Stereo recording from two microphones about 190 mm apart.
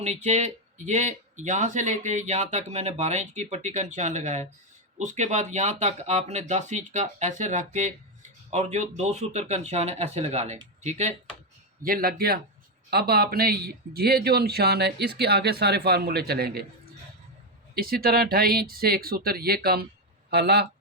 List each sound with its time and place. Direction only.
0.0 s speech: 35° right (ahead or behind)
11.8 s speech: 50° right (ahead or behind)
17.7 s speech: 55° right (ahead or behind)